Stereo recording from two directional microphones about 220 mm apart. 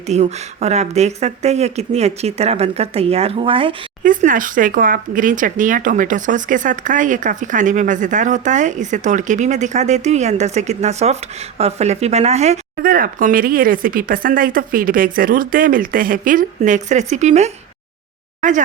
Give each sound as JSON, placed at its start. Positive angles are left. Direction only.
{"t": 0.1, "sound": "speech", "side_deg": -30}
{"t": 4.0, "sound": "speech", "side_deg": -35}